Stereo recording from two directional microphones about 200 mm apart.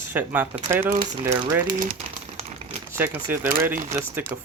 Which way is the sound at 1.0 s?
25° right (ahead or behind).